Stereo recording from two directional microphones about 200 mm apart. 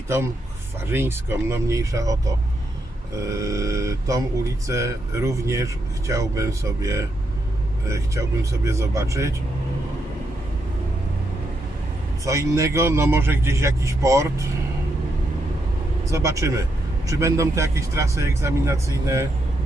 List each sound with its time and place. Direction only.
0.9 s speech: 10° right (ahead or behind)
12.2 s speech: 15° right (ahead or behind)
16.0 s speech: 15° right (ahead or behind)